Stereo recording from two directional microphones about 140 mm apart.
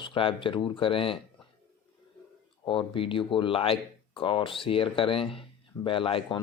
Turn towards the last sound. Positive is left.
turn(degrees=40)  # may be behind; listen again after turning